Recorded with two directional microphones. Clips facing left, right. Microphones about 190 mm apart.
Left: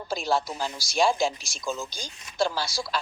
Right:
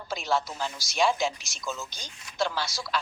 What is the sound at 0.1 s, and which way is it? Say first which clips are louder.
Speech: left 2 dB; 35° left (ahead or behind).